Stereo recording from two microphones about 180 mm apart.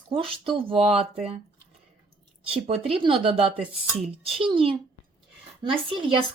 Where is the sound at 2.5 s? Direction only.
30° right (ahead or behind).